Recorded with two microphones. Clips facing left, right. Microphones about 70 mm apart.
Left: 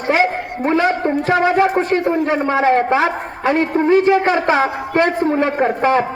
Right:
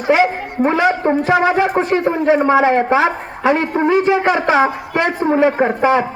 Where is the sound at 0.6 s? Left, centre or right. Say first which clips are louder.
Right 2 dB; centre.